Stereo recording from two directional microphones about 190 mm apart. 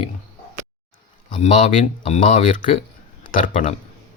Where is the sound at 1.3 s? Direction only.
40° left (ahead or behind).